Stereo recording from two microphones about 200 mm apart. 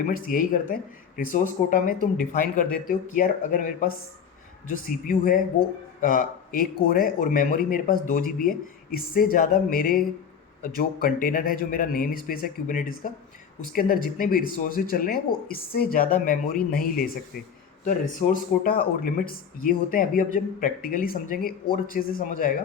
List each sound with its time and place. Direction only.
0.0 s speech: 45° left (ahead or behind)